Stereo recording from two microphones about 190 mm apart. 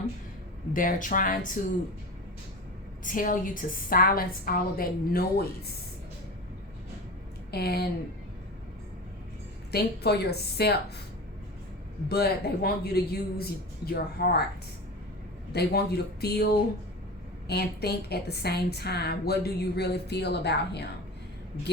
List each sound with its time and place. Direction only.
0.7 s a woman's voice: 45° left (ahead or behind)
3.0 s a woman's voice: 45° left (ahead or behind)
7.5 s a woman's voice: 55° left (ahead or behind)
9.7 s a woman's voice: 60° left (ahead or behind)
12.0 s a woman's voice: 55° left (ahead or behind)
15.5 s a woman's voice: 55° left (ahead or behind)